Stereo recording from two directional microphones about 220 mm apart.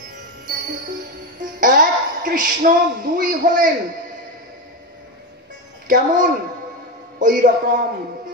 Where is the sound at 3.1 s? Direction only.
35° right (ahead or behind).